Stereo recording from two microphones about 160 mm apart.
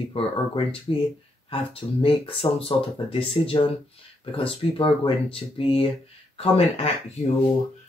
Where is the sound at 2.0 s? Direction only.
35° left (ahead or behind).